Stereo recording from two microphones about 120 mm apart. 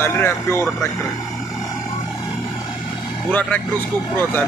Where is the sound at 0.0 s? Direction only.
20° left (ahead or behind).